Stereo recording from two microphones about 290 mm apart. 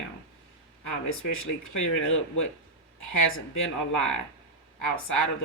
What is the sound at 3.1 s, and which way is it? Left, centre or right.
Speech, left.